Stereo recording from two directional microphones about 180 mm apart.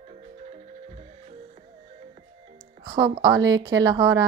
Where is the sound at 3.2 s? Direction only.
20° right (ahead or behind).